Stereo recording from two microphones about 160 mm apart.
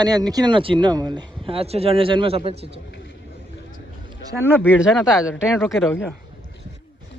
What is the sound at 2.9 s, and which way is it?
Vehicle, 90° left.